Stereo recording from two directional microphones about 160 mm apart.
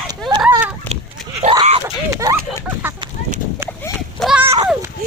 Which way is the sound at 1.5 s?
35° right (ahead or behind).